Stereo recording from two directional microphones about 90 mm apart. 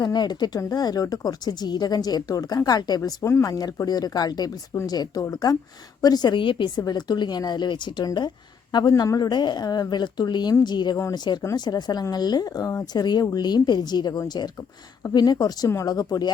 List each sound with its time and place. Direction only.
0.0 s a woman's voice: 50° left (ahead or behind)